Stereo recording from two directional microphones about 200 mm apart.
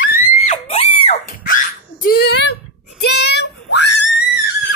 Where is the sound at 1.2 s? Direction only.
45° left (ahead or behind).